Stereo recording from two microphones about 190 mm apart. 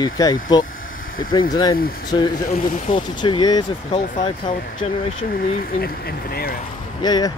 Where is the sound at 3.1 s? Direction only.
25° left (ahead or behind).